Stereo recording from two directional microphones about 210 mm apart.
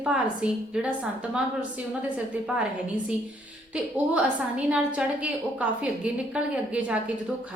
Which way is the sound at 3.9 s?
5° right (ahead or behind).